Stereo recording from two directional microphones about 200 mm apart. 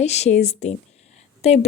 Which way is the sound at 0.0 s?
35° left (ahead or behind).